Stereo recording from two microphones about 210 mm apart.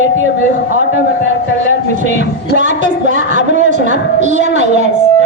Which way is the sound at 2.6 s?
35° right (ahead or behind).